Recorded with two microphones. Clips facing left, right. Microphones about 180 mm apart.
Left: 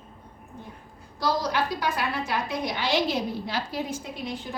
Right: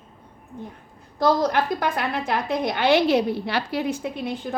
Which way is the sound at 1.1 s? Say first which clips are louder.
Right 6 dB; 55° right (ahead or behind).